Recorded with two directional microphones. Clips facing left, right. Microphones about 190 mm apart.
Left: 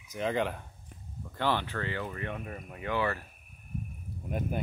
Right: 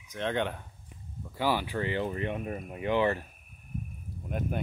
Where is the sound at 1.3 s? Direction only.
10° right (ahead or behind).